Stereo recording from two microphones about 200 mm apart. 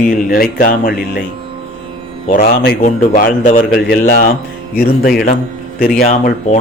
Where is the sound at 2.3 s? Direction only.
45° left (ahead or behind).